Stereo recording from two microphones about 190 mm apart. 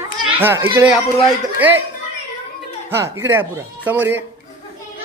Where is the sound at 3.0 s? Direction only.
15° right (ahead or behind).